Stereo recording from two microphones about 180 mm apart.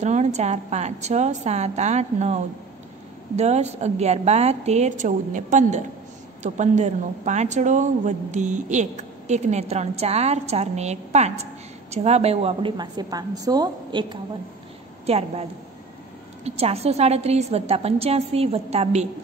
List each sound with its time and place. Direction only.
0.0 s a woman's voice: 40° right (ahead or behind); by 14.1 s 25° right (ahead or behind)
15.0 s speech: 35° right (ahead or behind)
16.4 s speech: 35° right (ahead or behind)